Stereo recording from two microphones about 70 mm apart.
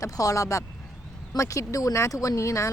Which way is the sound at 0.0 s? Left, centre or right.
Left.